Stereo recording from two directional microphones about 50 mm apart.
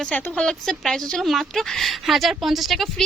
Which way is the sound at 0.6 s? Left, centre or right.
Centre.